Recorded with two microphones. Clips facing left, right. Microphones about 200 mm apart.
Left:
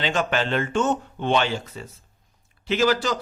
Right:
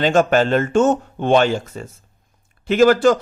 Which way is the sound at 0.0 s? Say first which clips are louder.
Right 9 dB; 45° right (ahead or behind).